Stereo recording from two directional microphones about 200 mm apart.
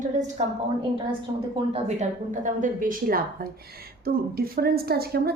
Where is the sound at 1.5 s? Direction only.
30° right (ahead or behind).